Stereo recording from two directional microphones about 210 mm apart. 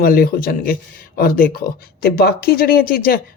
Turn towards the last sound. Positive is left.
turn(degrees=45)  # may be behind; listen again after turning